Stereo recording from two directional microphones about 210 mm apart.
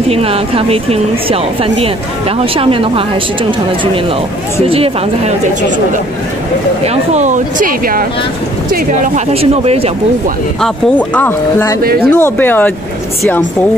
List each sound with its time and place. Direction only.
0.1 s speech: 30° right (ahead or behind)
4.6 s speech: 25° right (ahead or behind)
6.8 s speech: 30° right (ahead or behind)
9.3 s speech: 30° right (ahead or behind)
10.6 s speech: 5° left (ahead or behind)